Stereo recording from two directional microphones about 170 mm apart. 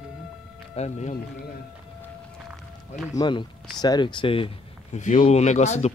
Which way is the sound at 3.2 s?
25° left (ahead or behind).